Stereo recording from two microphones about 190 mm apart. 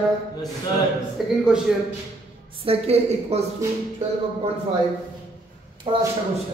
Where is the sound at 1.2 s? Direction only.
Centre (ahead or behind).